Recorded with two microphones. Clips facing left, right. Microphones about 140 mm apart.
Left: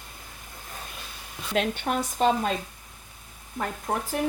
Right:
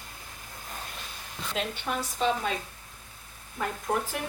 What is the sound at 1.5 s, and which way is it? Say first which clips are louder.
Speech: left 6 dB; 60° left (ahead or behind).